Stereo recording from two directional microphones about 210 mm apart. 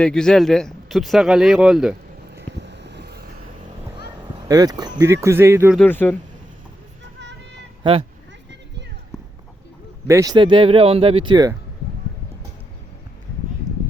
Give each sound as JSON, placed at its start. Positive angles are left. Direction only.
{"t": 0.0, "sound": "speech", "side_deg": 5}
{"t": 2.3, "sound": "vehicle", "side_deg": -55}
{"t": 4.0, "sound": "speech", "side_deg": -15}
{"t": 5.7, "sound": "speech", "side_deg": 10}
{"t": 7.8, "sound": "speech", "side_deg": -20}
{"t": 9.1, "sound": "clip-clop", "side_deg": 0}
{"t": 10.1, "sound": "speech", "side_deg": -15}